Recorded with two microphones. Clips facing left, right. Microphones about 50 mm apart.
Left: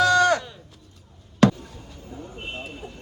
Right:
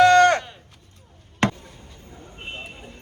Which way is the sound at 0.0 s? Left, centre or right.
Right.